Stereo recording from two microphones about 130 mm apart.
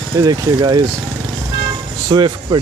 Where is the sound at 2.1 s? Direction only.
35° right (ahead or behind).